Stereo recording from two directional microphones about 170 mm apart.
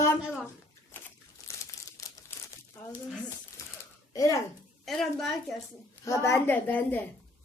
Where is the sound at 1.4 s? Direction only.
15° left (ahead or behind).